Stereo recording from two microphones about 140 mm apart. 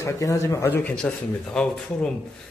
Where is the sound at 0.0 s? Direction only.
20° left (ahead or behind).